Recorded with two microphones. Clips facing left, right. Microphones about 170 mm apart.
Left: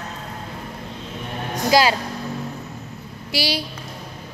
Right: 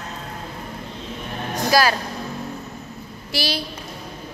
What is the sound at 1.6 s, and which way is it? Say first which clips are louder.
Speech: left 1 dB; 20° left (ahead or behind).